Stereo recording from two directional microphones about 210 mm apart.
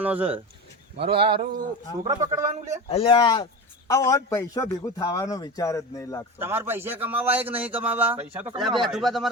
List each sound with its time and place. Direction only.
0.0 s a man's voice: 10° right (ahead or behind)
0.9 s a sound: 25° right (ahead or behind)
2.0 s a man's voice: 15° right (ahead or behind)
2.9 s a man's voice: 25° left (ahead or behind)
6.4 s a man's voice: 10° right (ahead or behind)